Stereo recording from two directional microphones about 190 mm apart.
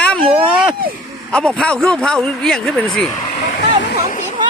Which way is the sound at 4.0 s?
45° left (ahead or behind).